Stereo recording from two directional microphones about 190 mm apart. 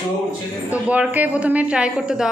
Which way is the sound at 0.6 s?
5° right (ahead or behind).